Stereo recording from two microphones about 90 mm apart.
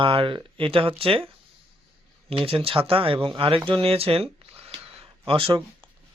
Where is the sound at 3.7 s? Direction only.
90° right.